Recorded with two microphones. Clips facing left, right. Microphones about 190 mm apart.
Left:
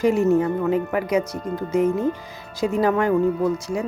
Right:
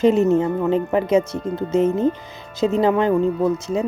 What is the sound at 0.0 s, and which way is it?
Speech, 20° right (ahead or behind).